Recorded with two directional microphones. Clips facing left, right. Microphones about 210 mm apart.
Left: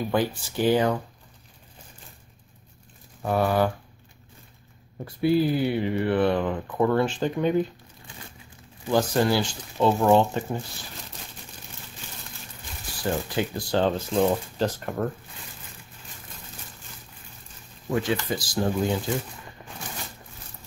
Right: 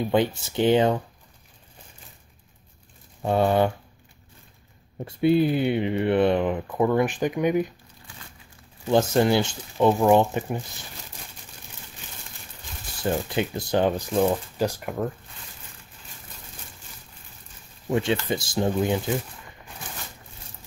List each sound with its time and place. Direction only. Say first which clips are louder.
0.1 s speech: right 3 dB; 20° right (ahead or behind)
3.2 s speech: right 2 dB; 25° right (ahead or behind)
5.0 s speech: right 2 dB; 20° right (ahead or behind)
8.9 s speech: right 2 dB; 20° right (ahead or behind)
13.0 s speech: right 1 dB; 20° right (ahead or behind); by 15.0 s 5° right (ahead or behind)
17.8 s speech: right 2 dB; 25° right (ahead or behind)